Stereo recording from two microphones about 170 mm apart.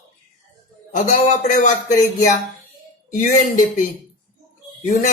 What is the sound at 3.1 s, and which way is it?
Speech, 50° left (ahead or behind).